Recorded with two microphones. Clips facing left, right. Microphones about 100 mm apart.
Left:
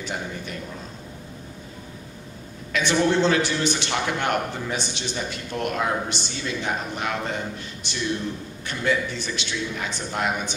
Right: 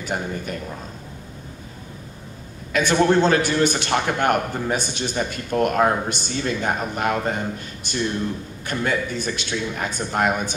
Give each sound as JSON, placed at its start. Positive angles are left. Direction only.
{"t": 0.0, "sound": "a man's voice", "side_deg": -50}
{"t": 2.7, "sound": "a man's voice", "side_deg": -45}